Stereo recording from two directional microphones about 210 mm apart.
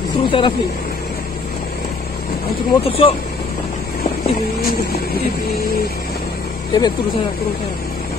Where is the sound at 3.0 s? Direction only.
25° left (ahead or behind).